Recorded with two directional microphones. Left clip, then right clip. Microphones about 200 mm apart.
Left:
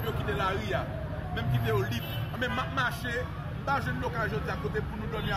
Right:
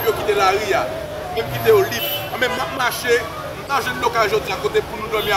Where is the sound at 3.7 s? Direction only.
5° right (ahead or behind).